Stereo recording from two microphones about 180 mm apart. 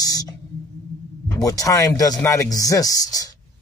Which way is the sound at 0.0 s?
20° left (ahead or behind).